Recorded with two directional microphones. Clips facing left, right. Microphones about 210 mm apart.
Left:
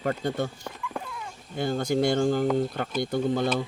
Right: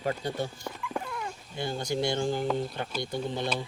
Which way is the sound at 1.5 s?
55° left (ahead or behind).